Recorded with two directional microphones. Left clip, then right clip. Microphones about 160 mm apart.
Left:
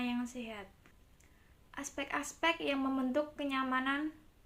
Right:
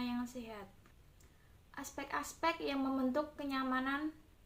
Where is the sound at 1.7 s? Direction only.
25° left (ahead or behind).